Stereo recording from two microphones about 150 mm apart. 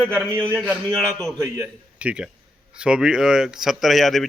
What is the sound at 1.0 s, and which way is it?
Speech, 5° left (ahead or behind).